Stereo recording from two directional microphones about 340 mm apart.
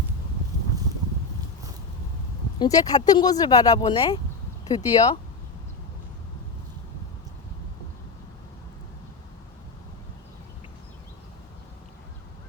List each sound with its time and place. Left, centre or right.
2.6 s speech: centre